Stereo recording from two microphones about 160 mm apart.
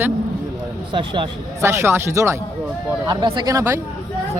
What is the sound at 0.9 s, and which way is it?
Speech, 30° right (ahead or behind).